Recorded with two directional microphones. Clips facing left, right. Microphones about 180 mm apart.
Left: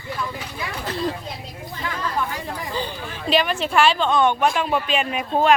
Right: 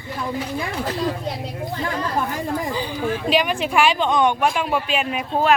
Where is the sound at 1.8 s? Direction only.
45° right (ahead or behind).